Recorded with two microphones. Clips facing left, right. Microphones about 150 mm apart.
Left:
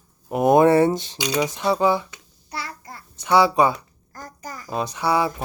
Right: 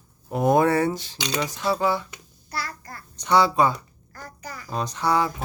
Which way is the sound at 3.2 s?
10° left (ahead or behind).